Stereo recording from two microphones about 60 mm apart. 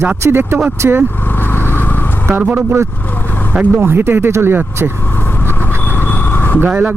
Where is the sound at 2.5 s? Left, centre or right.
Right.